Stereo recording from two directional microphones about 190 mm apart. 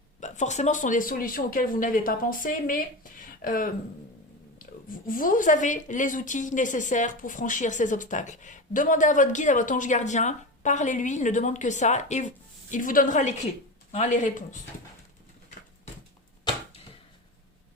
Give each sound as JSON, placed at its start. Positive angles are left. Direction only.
{"t": 0.2, "sound": "speech", "side_deg": 40}
{"t": 5.0, "sound": "speech", "side_deg": 45}